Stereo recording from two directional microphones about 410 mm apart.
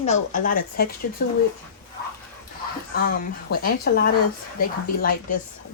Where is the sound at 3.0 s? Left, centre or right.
Left.